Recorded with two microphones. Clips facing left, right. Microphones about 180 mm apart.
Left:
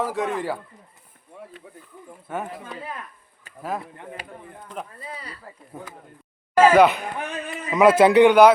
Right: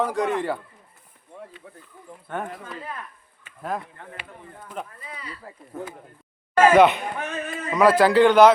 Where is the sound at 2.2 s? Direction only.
5° left (ahead or behind).